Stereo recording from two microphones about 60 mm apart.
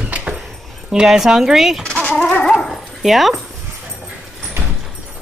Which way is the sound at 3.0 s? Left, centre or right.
Centre.